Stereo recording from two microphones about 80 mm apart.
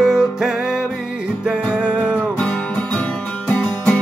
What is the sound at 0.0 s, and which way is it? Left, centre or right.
Music, centre.